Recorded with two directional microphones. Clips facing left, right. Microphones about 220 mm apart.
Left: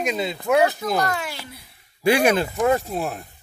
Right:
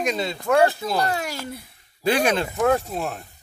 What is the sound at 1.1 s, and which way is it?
Speech, 40° right (ahead or behind).